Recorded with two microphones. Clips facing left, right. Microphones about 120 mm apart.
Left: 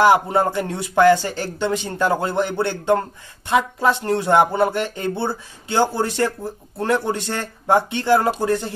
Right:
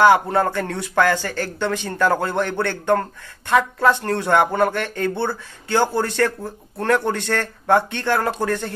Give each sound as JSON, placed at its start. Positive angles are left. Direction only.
{"t": 0.0, "sound": "speech", "side_deg": 15}